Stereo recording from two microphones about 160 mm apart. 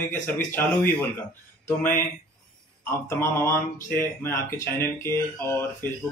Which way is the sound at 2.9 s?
15° left (ahead or behind).